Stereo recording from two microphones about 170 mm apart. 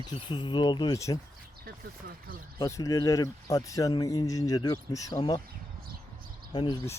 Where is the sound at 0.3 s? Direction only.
25° left (ahead or behind).